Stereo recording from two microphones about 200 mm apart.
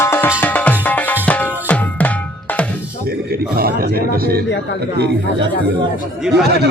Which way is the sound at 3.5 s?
50° right (ahead or behind).